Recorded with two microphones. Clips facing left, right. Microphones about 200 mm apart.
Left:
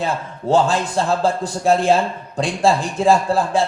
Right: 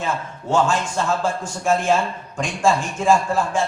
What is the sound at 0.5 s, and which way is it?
A man's voice, 35° left (ahead or behind).